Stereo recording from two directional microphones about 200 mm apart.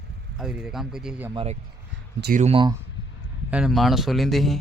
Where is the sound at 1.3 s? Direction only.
25° right (ahead or behind).